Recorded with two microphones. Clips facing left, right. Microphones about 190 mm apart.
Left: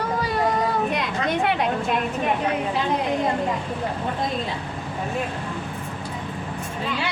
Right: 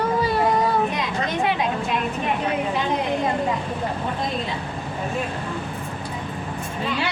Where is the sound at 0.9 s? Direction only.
60° left (ahead or behind).